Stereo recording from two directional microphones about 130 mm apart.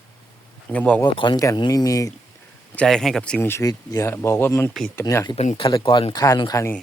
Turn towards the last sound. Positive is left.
turn(degrees=25)  # may be behind; listen again after turning